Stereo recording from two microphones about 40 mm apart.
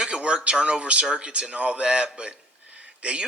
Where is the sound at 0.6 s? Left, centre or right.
Right.